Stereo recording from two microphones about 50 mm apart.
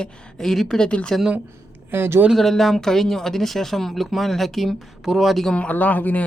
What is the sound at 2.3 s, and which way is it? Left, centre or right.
Speech, centre.